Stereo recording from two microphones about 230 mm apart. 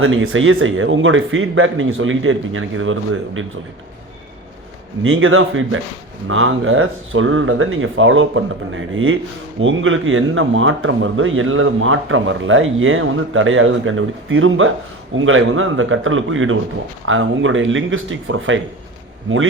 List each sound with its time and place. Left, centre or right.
0.0 s speech: right
5.0 s speech: right